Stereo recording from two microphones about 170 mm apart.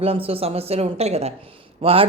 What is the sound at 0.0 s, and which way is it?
Speech, 35° right (ahead or behind).